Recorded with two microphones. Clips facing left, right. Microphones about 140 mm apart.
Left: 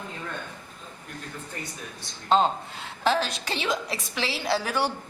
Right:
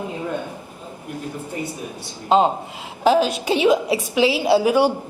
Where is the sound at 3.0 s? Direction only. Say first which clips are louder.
Right 8 dB; 5° right (ahead or behind).